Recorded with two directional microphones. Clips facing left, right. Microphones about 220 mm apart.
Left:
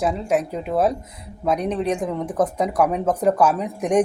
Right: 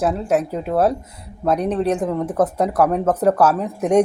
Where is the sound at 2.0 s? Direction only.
5° right (ahead or behind).